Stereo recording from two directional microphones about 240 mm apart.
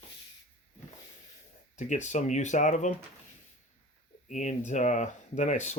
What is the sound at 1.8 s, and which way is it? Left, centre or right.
Speech, left.